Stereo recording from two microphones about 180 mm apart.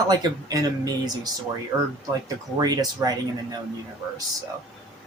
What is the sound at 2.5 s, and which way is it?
Speech, 20° right (ahead or behind).